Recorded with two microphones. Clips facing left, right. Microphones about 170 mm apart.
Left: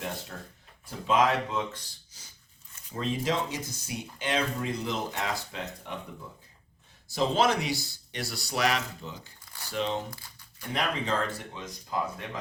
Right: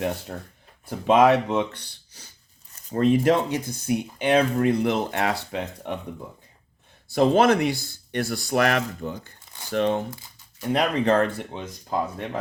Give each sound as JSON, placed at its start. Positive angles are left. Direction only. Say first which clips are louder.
{"t": 0.9, "sound": "speech", "louder": "right 8 dB", "side_deg": -65}
{"t": 7.1, "sound": "speech", "louder": "right 7 dB", "side_deg": -55}
{"t": 9.4, "sound": "crumpling", "louder": "right 2 dB", "side_deg": -20}
{"t": 9.7, "sound": "speech", "louder": "right 8 dB", "side_deg": -55}